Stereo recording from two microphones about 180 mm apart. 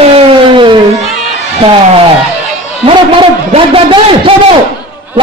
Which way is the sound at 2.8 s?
25° right (ahead or behind).